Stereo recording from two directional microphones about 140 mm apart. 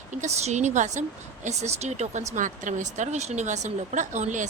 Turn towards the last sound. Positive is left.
turn(degrees=-60)  # may be behind; listen again after turning